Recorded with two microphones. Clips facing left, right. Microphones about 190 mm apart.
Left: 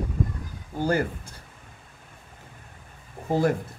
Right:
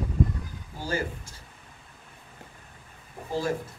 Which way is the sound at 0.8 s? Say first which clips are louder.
Left 6 dB; 60° left (ahead or behind).